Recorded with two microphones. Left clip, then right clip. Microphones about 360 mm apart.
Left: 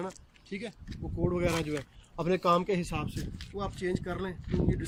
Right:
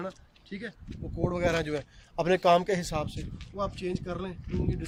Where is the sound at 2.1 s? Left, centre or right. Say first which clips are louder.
Right 4 dB; right.